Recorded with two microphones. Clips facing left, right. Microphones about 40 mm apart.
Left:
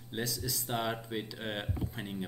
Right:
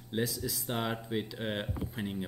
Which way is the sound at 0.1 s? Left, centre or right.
Centre.